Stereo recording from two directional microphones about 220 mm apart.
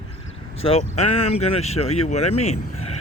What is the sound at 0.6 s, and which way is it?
Speech, 30° left (ahead or behind).